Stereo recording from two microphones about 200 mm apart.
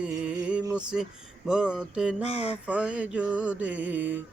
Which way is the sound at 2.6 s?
5° right (ahead or behind).